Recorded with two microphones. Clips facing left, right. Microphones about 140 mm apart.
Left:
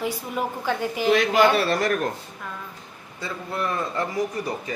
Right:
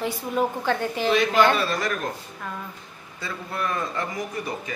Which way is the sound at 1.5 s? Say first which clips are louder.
Left 3 dB; 70° left (ahead or behind).